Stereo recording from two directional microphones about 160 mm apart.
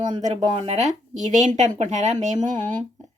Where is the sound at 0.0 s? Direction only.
50° right (ahead or behind).